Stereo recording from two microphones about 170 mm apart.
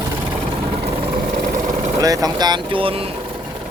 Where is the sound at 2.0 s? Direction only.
20° right (ahead or behind).